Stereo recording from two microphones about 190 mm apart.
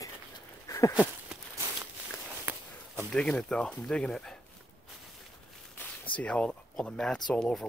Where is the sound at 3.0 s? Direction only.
5° left (ahead or behind).